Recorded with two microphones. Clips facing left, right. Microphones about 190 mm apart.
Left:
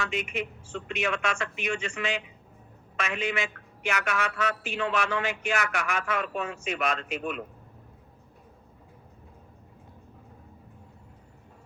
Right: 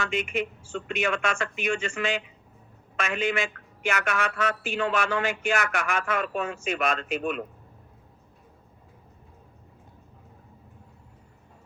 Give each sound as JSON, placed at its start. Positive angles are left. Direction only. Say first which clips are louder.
{"t": 0.0, "sound": "a man's voice", "louder": "right 3 dB", "side_deg": -50}